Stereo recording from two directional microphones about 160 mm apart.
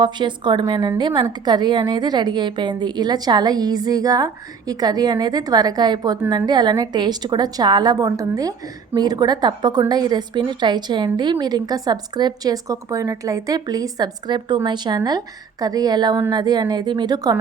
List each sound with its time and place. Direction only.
0.0 s a woman's voice: 30° right (ahead or behind)